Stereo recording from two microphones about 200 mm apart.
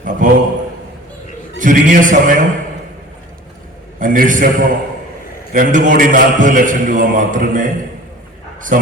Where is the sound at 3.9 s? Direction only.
45° right (ahead or behind).